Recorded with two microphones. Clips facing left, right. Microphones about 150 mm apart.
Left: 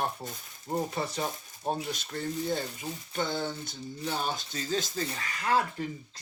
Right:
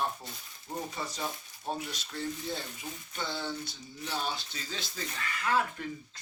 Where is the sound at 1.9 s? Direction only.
50° left (ahead or behind).